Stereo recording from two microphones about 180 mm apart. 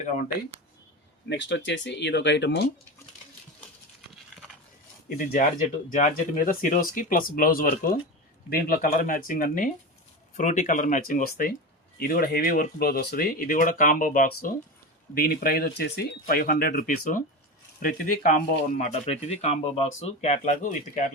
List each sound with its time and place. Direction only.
1.3 s speech: 75° left (ahead or behind)
5.0 s speech: 45° left (ahead or behind)
18.9 s speech: 35° left (ahead or behind)